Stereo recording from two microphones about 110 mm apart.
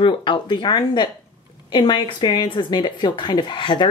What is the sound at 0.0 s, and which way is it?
A woman's voice, 50° left (ahead or behind).